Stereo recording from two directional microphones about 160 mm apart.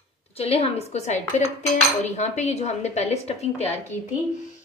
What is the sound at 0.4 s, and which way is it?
A woman's voice, 40° left (ahead or behind).